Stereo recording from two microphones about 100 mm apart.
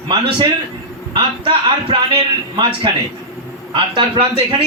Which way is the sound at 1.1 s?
60° right (ahead or behind).